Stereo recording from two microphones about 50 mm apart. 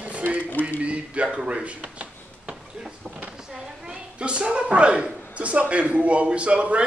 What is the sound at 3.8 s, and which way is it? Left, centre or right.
Speech, right.